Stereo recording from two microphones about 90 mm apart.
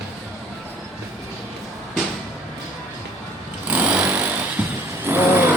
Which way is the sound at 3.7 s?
15° right (ahead or behind).